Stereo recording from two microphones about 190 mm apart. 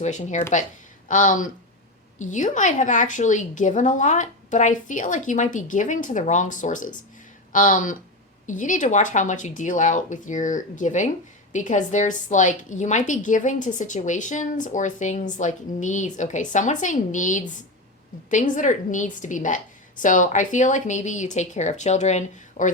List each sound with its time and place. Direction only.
0.0 s a woman's voice: 40° left (ahead or behind)